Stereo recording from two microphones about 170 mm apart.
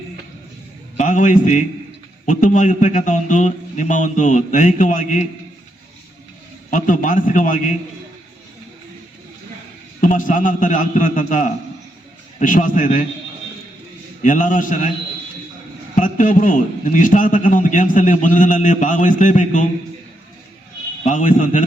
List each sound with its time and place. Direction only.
0.9 s a man's voice: 50° left (ahead or behind)
6.7 s a man's voice: 50° left (ahead or behind)
10.0 s a man's voice: 50° left (ahead or behind)
14.2 s a man's voice: 50° left (ahead or behind)
16.0 s a man's voice: 50° left (ahead or behind)
21.0 s a man's voice: 50° left (ahead or behind)